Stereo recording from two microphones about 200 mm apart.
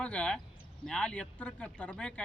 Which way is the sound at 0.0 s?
5° left (ahead or behind).